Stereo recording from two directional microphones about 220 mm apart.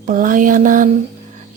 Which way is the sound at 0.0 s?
35° right (ahead or behind).